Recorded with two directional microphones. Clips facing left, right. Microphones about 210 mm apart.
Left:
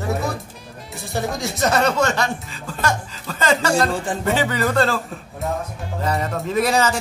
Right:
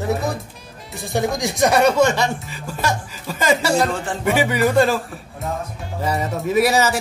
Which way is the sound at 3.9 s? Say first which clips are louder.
Left 1 dB; 15° left (ahead or behind).